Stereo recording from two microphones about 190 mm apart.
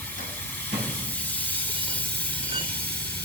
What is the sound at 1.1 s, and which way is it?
Hiss, 10° left (ahead or behind).